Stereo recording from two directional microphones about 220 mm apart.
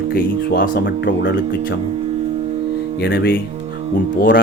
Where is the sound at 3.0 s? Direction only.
45° left (ahead or behind).